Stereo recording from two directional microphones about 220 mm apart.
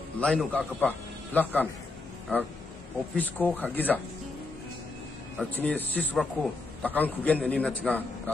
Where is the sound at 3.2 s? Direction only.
5° left (ahead or behind).